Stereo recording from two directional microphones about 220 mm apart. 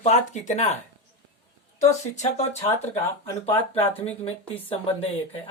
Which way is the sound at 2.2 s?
30° left (ahead or behind).